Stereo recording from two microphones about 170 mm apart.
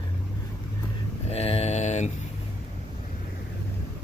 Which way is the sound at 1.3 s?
35° left (ahead or behind).